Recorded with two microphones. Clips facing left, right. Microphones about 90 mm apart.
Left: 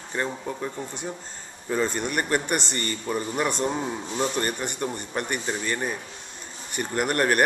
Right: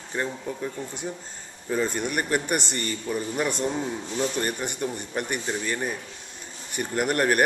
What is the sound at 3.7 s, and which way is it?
Speech, 20° left (ahead or behind).